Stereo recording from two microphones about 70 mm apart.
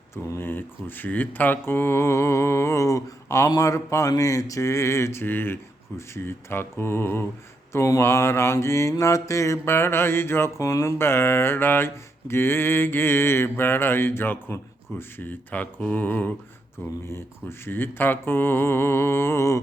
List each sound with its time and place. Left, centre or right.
0.3 s mantra: left
3.5 s speech: left
6.0 s mantra: left
10.6 s speech: left
10.9 s mantra: left